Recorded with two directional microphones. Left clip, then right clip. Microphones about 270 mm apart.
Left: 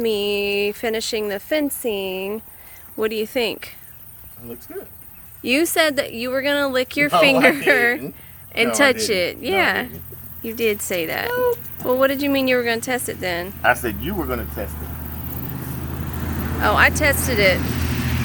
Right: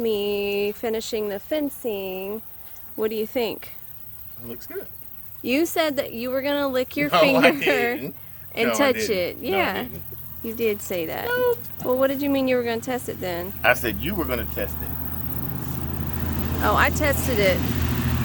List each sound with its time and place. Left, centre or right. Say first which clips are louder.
0.0 s speech: left 3 dB; centre
3.0 s speech: left 3 dB; centre
5.4 s speech: left 4 dB; centre
16.6 s speech: left 4 dB; centre
17.7 s vehicle: left 2 dB; centre